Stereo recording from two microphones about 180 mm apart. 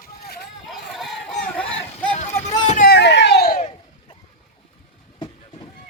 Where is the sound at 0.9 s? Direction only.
Centre (ahead or behind).